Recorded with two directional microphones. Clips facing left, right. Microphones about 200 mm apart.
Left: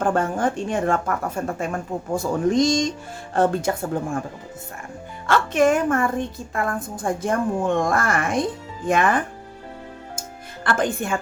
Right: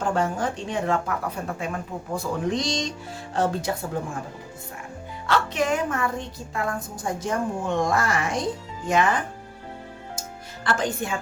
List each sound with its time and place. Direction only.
0.0 s a woman's voice: 55° left (ahead or behind)
5.2 s a woman's voice: 50° left (ahead or behind)
10.6 s a woman's voice: 55° left (ahead or behind)